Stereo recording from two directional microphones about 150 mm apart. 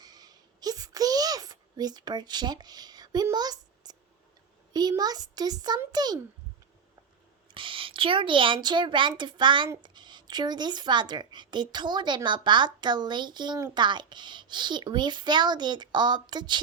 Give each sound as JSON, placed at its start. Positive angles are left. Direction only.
{"t": 0.0, "sound": "a sound", "side_deg": -25}
{"t": 4.7, "sound": "speech", "side_deg": -25}
{"t": 7.5, "sound": "speech", "side_deg": -35}